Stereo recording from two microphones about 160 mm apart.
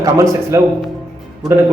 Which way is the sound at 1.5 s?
15° right (ahead or behind).